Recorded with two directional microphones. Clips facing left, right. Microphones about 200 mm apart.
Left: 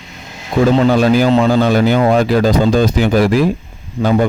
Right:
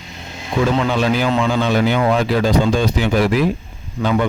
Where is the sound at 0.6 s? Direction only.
45° left (ahead or behind).